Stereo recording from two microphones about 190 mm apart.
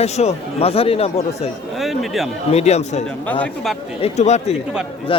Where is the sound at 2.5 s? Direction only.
35° left (ahead or behind).